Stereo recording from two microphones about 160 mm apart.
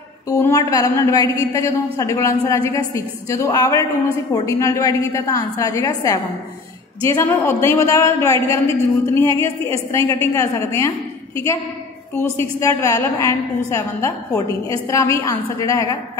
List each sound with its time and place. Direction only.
0.3 s a woman's voice: 20° left (ahead or behind)
12.4 s a woman's voice: 20° left (ahead or behind)